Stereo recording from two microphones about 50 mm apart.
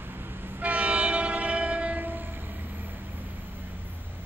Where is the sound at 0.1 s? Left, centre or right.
Right.